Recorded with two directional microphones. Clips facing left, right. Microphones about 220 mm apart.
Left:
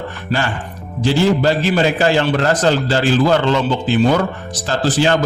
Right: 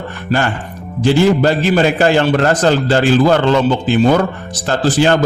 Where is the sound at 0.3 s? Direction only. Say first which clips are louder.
Right 4 dB; 45° right (ahead or behind).